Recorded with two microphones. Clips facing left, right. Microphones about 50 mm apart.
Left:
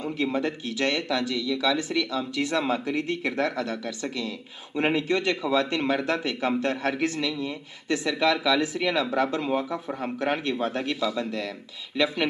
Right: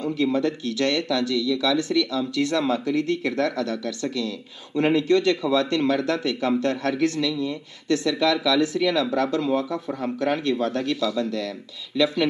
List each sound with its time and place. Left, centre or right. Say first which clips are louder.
0.0 s speech: right 4 dB; left